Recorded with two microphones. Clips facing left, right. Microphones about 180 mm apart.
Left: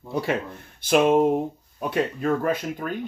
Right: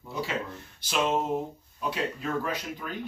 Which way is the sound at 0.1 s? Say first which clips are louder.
Left 7 dB; 55° left (ahead or behind).